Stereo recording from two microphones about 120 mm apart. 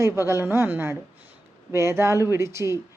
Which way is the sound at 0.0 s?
20° right (ahead or behind).